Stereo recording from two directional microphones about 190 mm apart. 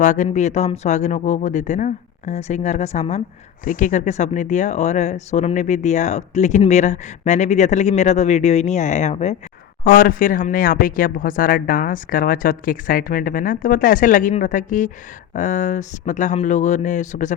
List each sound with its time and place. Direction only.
0.0 s speech: 40° left (ahead or behind)
9.8 s speech: 45° left (ahead or behind)